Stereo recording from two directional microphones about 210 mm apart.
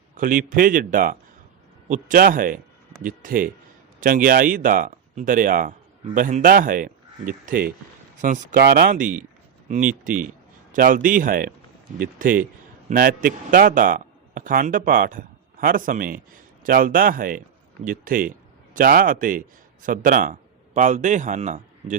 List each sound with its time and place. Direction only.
0.2 s a man's voice: 40° right (ahead or behind)